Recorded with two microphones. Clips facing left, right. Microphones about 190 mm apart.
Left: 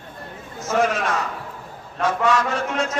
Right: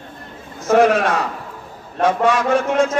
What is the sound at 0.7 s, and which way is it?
Speech, 60° right (ahead or behind).